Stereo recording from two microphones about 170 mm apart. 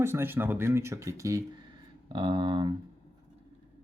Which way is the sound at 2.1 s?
25° right (ahead or behind).